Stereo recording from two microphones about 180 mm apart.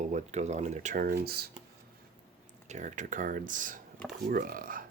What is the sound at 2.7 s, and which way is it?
Speech, 45° right (ahead or behind).